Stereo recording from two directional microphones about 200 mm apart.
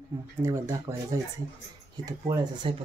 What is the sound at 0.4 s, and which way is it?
Speech, 15° right (ahead or behind).